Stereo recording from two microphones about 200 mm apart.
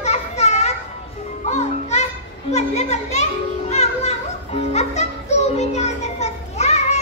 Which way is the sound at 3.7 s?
30° left (ahead or behind).